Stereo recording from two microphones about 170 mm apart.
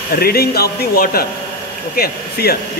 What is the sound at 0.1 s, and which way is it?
Speech, 65° left (ahead or behind).